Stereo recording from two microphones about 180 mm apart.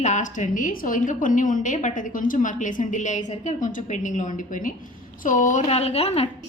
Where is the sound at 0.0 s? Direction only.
45° left (ahead or behind).